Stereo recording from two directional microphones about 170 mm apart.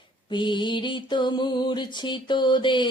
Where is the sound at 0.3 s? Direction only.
30° left (ahead or behind).